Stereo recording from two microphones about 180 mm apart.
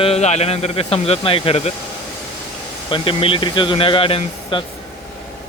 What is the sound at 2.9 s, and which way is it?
Speech, 30° left (ahead or behind).